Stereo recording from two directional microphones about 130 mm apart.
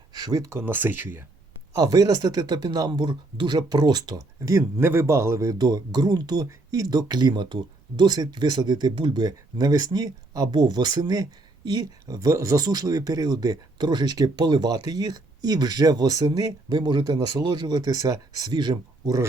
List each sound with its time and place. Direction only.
0.1 s speech: 30° right (ahead or behind); by 1.2 s 15° right (ahead or behind)
1.7 s speech: 30° right (ahead or behind)